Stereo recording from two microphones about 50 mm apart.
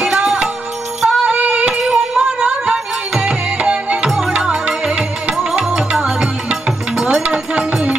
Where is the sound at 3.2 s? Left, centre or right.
Right.